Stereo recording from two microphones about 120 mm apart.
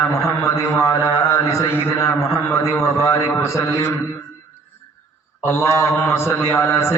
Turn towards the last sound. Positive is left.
turn(degrees=20)  # may be behind; listen again after turning